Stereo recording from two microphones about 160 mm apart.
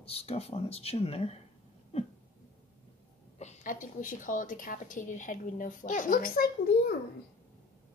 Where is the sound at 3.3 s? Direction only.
50° left (ahead or behind).